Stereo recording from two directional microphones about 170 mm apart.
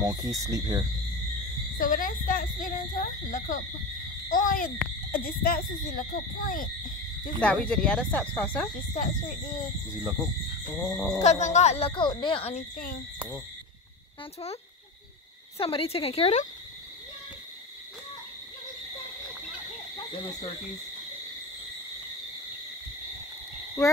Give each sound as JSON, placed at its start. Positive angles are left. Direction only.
{"t": 0.0, "sound": "speech", "side_deg": -20}
{"t": 1.8, "sound": "speech", "side_deg": 55}
{"t": 7.3, "sound": "speech", "side_deg": 5}
{"t": 8.9, "sound": "speech", "side_deg": 50}
{"t": 10.7, "sound": "wild animals", "side_deg": 5}
{"t": 11.1, "sound": "speech", "side_deg": 40}
{"t": 12.7, "sound": "speech", "side_deg": 60}
{"t": 15.5, "sound": "speech", "side_deg": 35}